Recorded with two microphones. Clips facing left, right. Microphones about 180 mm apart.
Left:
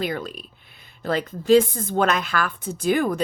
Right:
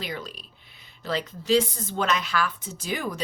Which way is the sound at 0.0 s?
55° left (ahead or behind).